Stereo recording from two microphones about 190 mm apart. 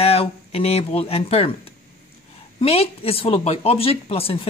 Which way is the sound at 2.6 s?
30° left (ahead or behind).